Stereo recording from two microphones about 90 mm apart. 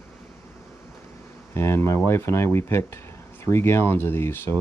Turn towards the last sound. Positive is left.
turn(degrees=25)  # may be behind; listen again after turning